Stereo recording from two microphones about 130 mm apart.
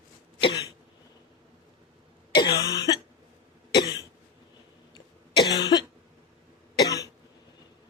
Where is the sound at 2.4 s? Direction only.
35° left (ahead or behind).